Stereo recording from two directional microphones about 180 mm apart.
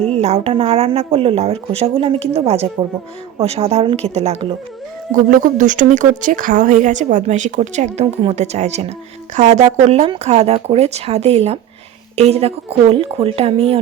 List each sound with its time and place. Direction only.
0.1 s speech: 35° right (ahead or behind)
5.1 s a woman's voice: 45° right (ahead or behind)